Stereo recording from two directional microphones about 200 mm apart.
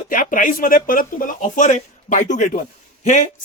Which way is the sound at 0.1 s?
45° left (ahead or behind).